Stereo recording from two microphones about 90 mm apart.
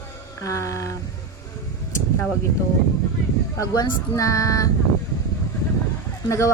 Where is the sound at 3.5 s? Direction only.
45° left (ahead or behind).